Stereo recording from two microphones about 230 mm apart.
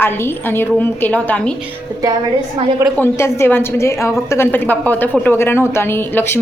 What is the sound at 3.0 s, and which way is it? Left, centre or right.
A woman's voice, centre.